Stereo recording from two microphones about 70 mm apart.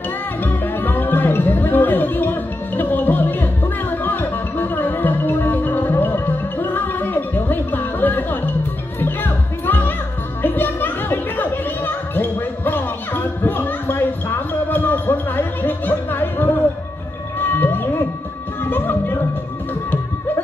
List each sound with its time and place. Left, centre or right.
0.4 s music: left
10.4 s a sound: left
17.6 s music: left